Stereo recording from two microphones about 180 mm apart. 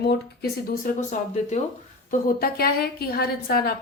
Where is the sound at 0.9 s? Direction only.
50° left (ahead or behind).